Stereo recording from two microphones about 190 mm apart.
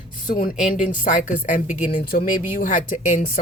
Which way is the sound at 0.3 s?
45° left (ahead or behind).